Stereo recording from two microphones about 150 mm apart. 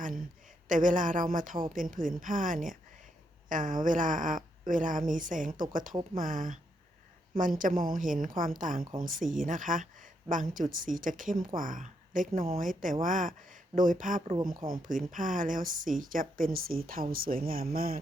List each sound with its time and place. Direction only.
0.7 s speech: 60° right (ahead or behind)
7.6 s speech: 70° right (ahead or behind)